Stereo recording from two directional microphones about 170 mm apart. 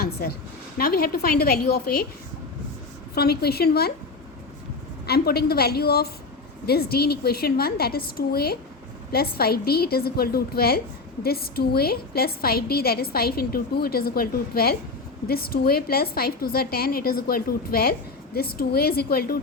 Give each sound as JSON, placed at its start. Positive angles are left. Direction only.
{"t": 0.0, "sound": "a sound", "side_deg": 65}
{"t": 0.8, "sound": "a woman's voice", "side_deg": 65}
{"t": 3.2, "sound": "a woman's voice", "side_deg": 70}
{"t": 5.0, "sound": "a woman's voice", "side_deg": 65}